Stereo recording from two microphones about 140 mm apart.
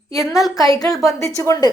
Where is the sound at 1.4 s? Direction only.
20° left (ahead or behind).